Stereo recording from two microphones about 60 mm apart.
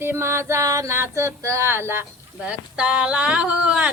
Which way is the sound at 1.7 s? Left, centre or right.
Right.